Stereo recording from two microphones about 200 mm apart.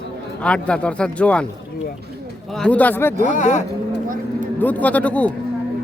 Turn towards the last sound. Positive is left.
turn(degrees=5)  # may be behind; listen again after turning